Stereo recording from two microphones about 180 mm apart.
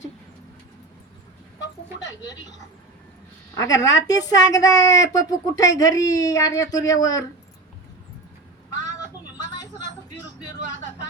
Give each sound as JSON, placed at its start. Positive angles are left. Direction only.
{"t": 2.0, "sound": "speech", "side_deg": 20}
{"t": 3.5, "sound": "speech", "side_deg": 20}